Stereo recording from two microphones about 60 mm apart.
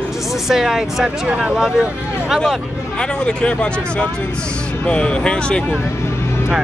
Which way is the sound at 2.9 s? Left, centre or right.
Centre.